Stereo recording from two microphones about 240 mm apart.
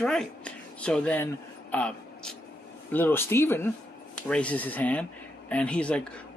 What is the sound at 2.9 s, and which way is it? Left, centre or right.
A man's voice, centre.